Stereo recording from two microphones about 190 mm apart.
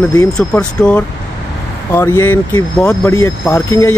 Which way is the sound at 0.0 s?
10° left (ahead or behind).